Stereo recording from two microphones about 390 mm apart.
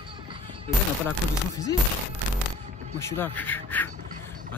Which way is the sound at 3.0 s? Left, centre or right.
Centre.